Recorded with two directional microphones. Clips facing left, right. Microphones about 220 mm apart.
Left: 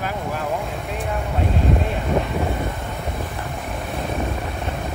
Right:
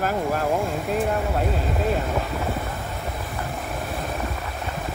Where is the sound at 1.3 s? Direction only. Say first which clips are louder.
Left 3 dB; centre (ahead or behind).